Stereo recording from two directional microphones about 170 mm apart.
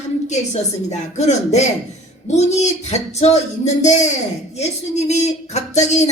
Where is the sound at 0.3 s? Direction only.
40° left (ahead or behind).